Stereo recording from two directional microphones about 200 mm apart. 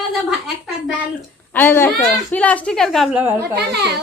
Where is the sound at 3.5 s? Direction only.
55° right (ahead or behind).